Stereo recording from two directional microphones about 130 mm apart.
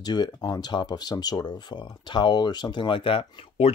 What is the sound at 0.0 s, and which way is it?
Speech, 30° left (ahead or behind).